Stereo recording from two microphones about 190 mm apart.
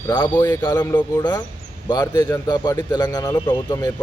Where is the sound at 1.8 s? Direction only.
20° left (ahead or behind).